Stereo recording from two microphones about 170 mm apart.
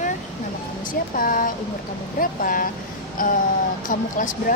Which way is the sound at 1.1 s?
55° left (ahead or behind).